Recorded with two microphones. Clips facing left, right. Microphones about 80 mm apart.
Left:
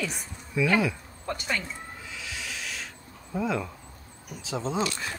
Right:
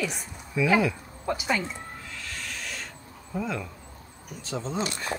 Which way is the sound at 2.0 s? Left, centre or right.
Centre.